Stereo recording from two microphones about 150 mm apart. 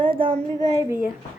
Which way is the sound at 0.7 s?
20° right (ahead or behind).